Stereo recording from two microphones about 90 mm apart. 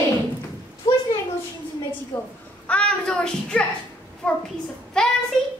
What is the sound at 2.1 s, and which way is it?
A child's voice, 20° left (ahead or behind).